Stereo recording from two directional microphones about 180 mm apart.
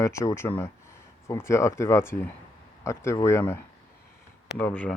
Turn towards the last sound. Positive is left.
turn(degrees=10)  # may be behind; listen again after turning